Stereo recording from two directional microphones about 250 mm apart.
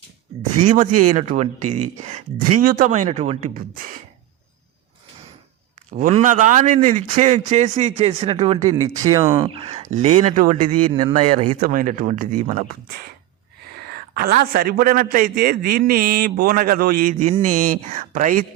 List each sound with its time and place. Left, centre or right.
0.6 s speech: right
5.9 s speech: right
8.7 s speech: centre; by 10.7 s right
10.7 s speech: right
11.1 s speech: right
11.6 s a man's voice: right